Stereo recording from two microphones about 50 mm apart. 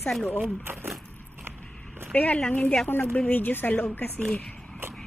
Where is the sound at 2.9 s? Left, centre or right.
Left.